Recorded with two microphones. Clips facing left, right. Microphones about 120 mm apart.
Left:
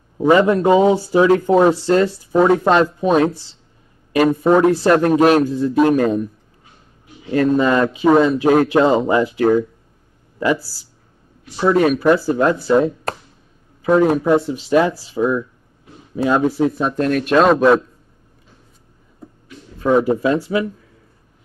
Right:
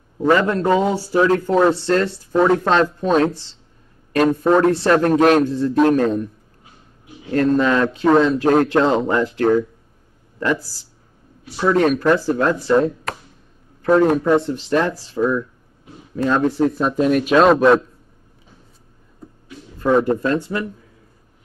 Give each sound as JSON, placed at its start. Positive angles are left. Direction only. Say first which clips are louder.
{"t": 0.2, "sound": "a man's voice", "louder": "left 3 dB", "side_deg": 15}
{"t": 19.8, "sound": "a man's voice", "louder": "left 1 dB", "side_deg": 5}